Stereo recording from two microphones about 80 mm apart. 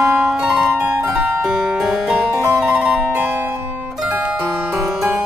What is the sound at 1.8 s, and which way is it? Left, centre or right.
Music, centre.